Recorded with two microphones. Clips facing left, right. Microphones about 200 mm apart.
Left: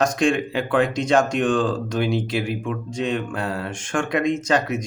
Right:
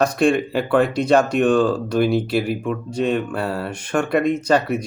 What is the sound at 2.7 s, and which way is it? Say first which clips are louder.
Speech: right 4 dB; 55° right (ahead or behind).